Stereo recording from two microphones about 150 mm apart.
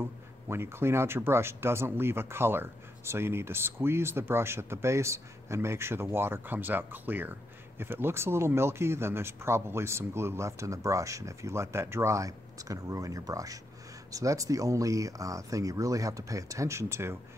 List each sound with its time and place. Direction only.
0.0 s speech: 15° right (ahead or behind)